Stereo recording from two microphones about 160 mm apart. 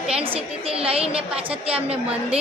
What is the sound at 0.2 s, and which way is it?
Speech, 35° right (ahead or behind).